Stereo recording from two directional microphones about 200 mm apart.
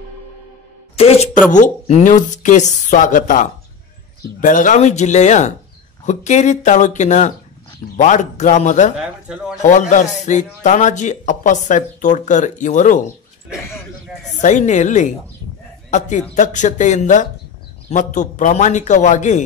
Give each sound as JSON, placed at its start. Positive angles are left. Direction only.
{"t": 0.9, "sound": "speech", "side_deg": 30}
{"t": 14.4, "sound": "speech", "side_deg": 35}